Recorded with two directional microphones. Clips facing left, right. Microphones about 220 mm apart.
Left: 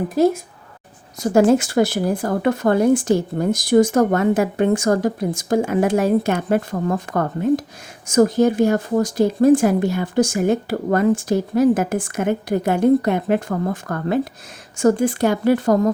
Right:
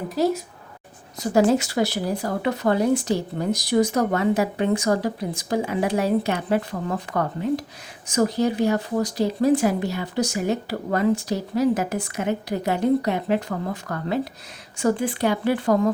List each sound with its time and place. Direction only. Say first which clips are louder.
0.1 s speech: left 4 dB; 50° left (ahead or behind)